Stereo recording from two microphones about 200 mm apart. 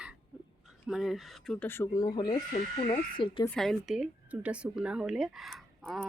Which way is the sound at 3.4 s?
5° left (ahead or behind).